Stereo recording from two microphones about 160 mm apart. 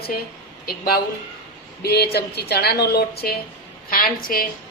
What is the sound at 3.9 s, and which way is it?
Speech, 65° left (ahead or behind).